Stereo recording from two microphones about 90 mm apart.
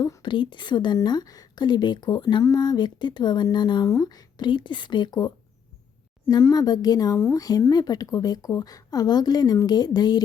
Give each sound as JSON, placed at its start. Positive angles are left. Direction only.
{"t": 0.2, "sound": "a woman's voice", "side_deg": 60}
{"t": 3.8, "sound": "a woman's voice", "side_deg": 40}
{"t": 6.2, "sound": "a woman's voice", "side_deg": 40}